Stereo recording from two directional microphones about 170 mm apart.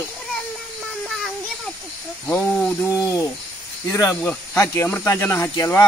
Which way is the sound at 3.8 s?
20° left (ahead or behind).